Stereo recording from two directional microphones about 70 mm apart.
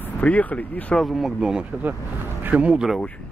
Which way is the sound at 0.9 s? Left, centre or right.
Centre.